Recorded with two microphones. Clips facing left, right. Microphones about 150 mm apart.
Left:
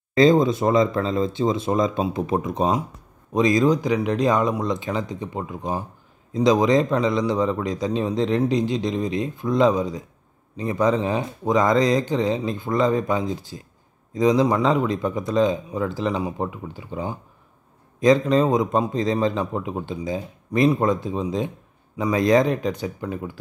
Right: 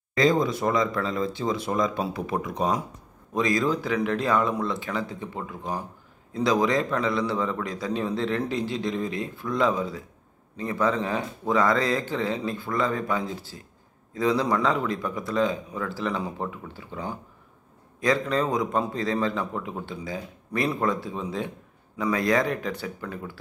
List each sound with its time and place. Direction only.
0.1 s a man's voice: 25° left (ahead or behind)